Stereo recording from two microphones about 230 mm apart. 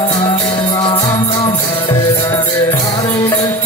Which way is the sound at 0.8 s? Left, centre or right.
Left.